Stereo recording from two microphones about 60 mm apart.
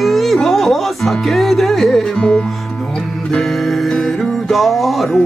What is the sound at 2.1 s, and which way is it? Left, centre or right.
Music, centre.